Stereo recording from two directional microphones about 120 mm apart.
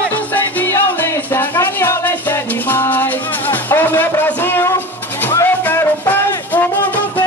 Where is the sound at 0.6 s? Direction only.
15° left (ahead or behind).